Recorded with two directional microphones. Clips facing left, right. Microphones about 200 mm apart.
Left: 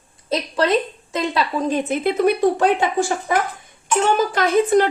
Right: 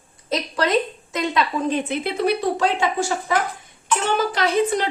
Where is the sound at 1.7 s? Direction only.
45° left (ahead or behind).